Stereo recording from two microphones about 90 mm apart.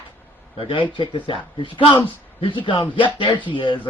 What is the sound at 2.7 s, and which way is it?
Speech, 65° left (ahead or behind).